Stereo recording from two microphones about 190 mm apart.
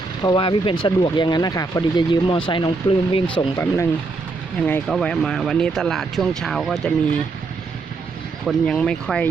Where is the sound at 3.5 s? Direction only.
15° left (ahead or behind).